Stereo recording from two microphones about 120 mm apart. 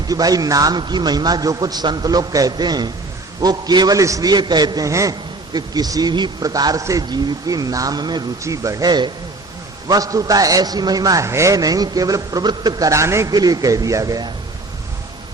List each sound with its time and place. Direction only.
0.1 s a man's voice: 30° right (ahead or behind)